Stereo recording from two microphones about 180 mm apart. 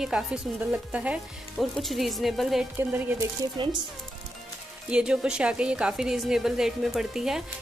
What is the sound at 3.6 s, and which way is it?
Speech, 25° right (ahead or behind).